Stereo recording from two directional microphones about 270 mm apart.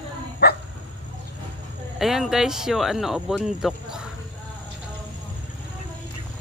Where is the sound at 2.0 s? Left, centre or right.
Centre.